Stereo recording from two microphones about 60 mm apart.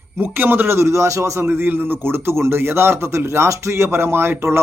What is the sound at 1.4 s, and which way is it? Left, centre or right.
A man's voice, right.